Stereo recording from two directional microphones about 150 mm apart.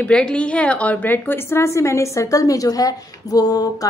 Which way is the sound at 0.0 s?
5° left (ahead or behind).